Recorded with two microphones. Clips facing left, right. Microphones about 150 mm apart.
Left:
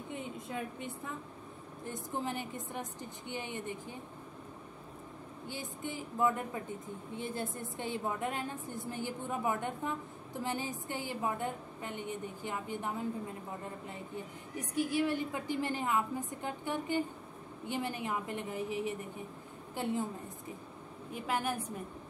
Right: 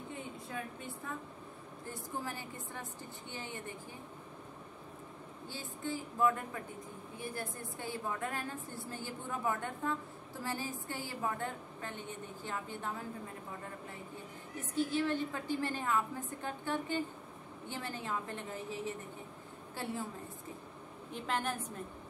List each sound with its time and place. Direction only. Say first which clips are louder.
0.1 s a woman's voice: left 4 dB; 20° left (ahead or behind)
5.5 s a woman's voice: right 1 dB; 15° left (ahead or behind)
14.6 s a woman's voice: left 2 dB; 15° left (ahead or behind)
21.1 s a woman's voice: left 2 dB; 10° left (ahead or behind)